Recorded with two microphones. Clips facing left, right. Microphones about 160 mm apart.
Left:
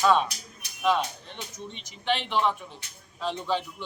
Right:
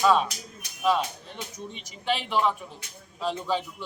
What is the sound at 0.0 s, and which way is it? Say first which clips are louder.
A man's voice: right 1 dB; 5° right (ahead or behind).